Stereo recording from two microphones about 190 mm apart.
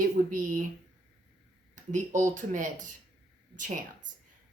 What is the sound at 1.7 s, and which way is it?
A woman's voice, 40° right (ahead or behind).